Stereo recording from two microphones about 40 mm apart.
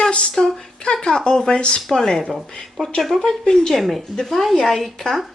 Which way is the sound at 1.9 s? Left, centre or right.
Centre.